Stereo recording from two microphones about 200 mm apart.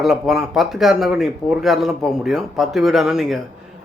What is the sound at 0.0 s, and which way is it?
Speech, centre (ahead or behind).